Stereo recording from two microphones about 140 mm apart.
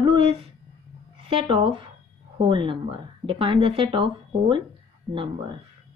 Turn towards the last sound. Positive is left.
turn(degrees=-35)  # may be behind; listen again after turning